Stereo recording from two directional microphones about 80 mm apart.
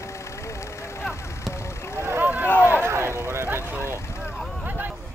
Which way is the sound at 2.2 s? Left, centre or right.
Centre.